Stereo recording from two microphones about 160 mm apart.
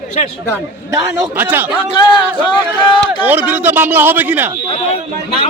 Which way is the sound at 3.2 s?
10° right (ahead or behind).